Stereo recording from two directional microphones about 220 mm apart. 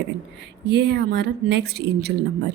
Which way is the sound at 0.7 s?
50° right (ahead or behind).